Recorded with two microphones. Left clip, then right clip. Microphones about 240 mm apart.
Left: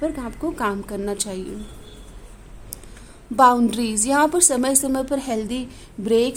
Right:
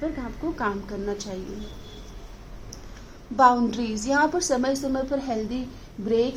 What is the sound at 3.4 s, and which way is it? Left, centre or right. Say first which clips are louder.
A woman's voice: left 3 dB; left.